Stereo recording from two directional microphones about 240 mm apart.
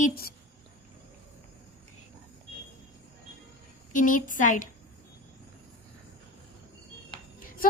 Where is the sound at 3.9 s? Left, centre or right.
Left.